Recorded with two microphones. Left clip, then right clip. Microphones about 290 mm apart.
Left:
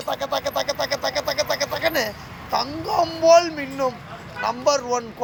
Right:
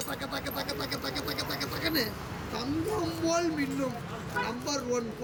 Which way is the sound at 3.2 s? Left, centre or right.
Centre.